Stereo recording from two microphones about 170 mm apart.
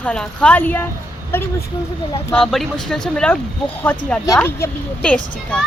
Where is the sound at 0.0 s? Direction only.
5° left (ahead or behind).